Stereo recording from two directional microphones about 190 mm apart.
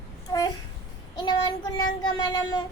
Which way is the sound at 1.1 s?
20° left (ahead or behind).